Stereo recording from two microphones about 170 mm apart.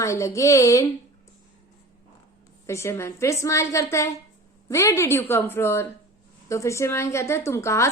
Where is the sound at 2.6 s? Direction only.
15° left (ahead or behind).